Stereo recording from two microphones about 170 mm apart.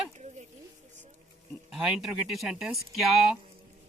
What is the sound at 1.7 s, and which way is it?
Speech, 5° right (ahead or behind).